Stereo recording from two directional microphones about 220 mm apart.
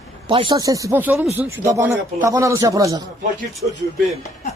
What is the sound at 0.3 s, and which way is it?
A man's voice, 25° right (ahead or behind).